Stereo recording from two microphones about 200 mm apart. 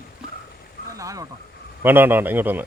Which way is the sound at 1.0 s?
15° right (ahead or behind).